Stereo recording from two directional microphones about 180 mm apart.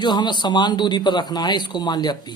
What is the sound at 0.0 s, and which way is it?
Speech, 25° left (ahead or behind).